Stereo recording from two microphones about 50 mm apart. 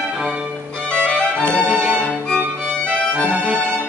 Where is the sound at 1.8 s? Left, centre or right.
Centre.